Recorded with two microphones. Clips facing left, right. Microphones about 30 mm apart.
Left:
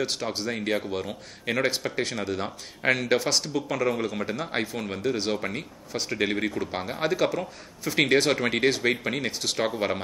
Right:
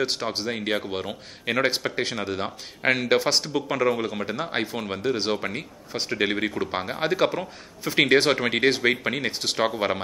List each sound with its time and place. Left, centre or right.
0.0 s a man's voice: right